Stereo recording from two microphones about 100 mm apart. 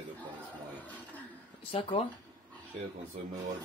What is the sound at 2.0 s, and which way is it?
Speech, 90° left.